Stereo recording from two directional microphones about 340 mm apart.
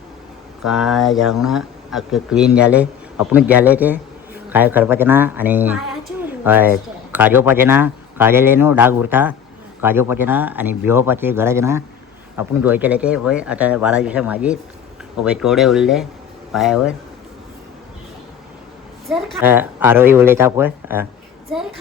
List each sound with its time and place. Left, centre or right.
0.6 s a woman's voice: centre
19.0 s speech: centre